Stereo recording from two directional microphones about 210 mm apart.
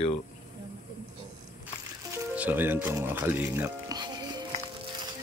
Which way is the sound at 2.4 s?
10° right (ahead or behind).